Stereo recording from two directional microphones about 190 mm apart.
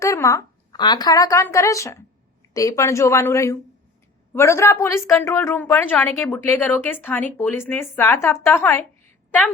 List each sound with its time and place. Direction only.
0.0 s speech: 15° left (ahead or behind)